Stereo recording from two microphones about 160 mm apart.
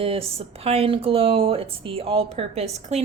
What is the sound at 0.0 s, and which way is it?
A woman's voice, 35° right (ahead or behind).